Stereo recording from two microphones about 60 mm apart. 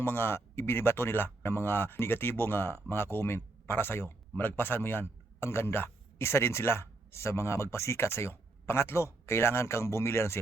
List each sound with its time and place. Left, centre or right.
0.0 s speech: left